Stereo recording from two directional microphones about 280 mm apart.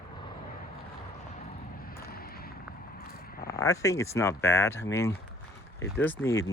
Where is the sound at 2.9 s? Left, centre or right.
Left.